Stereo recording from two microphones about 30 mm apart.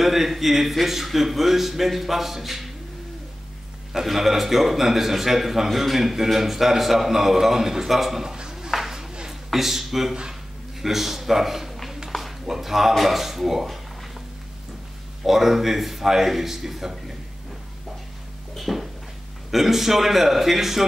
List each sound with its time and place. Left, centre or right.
0.0 s a man's voice: centre
3.9 s a man's voice: centre
8.5 s a sound: centre
10.8 s a man's voice: centre
12.1 s a sound: centre
12.4 s a man's voice: centre
15.2 s a man's voice: centre
18.6 s a sound: centre
19.5 s a man's voice: centre